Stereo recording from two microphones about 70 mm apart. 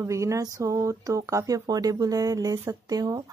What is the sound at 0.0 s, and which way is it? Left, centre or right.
Speech, right.